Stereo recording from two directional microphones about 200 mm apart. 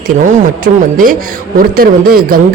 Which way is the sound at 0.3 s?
40° right (ahead or behind).